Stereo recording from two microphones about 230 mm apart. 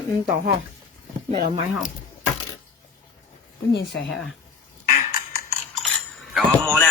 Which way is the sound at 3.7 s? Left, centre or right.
Left.